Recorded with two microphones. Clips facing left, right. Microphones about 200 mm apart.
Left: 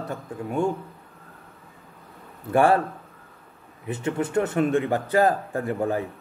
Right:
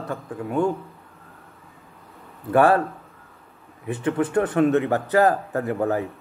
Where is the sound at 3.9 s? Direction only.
25° left (ahead or behind).